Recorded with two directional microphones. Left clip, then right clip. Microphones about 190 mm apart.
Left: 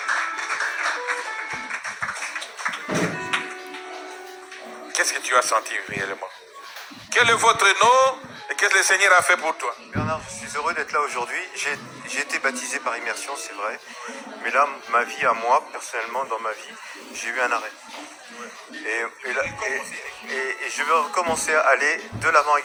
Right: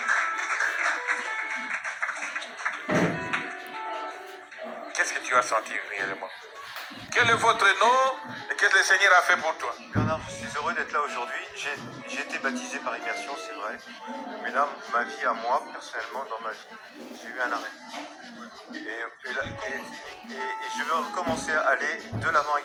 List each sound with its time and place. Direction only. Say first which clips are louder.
0.0 s music: left 1 dB; 35° left (ahead or behind)
4.9 s a man's voice: left 4 dB; 35° left (ahead or behind)
8.7 s speech: left 2 dB; 25° left (ahead or behind)
9.0 s speech: left 3 dB; 45° left (ahead or behind)
14.5 s speech: left 6 dB; 40° left (ahead or behind)
18.9 s speech: left 9 dB; 45° left (ahead or behind)